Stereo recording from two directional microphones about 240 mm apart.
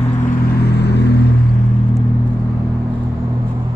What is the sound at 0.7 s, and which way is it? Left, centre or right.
Vehicle, left.